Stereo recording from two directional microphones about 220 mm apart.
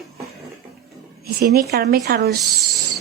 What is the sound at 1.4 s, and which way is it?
Speech, 45° right (ahead or behind).